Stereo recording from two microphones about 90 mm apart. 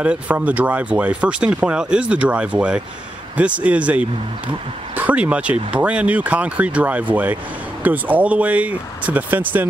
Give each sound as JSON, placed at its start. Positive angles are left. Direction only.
{"t": 0.0, "sound": "speech", "side_deg": -15}